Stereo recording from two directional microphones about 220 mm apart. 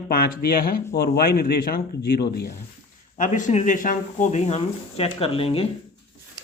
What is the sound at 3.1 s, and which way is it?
Speech, 35° left (ahead or behind).